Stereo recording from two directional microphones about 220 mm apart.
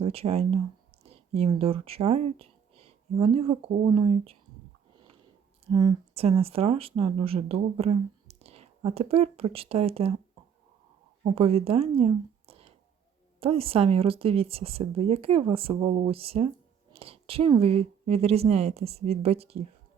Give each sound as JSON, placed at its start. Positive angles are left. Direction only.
{"t": 0.0, "sound": "speech", "side_deg": -25}
{"t": 5.7, "sound": "speech", "side_deg": -25}
{"t": 11.2, "sound": "speech", "side_deg": -25}